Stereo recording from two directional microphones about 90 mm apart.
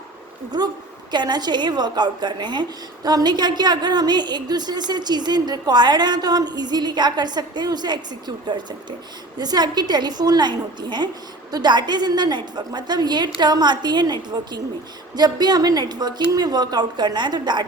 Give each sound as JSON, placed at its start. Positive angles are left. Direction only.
{"t": 0.5, "sound": "a woman's voice", "side_deg": -50}
{"t": 9.4, "sound": "a woman's voice", "side_deg": -50}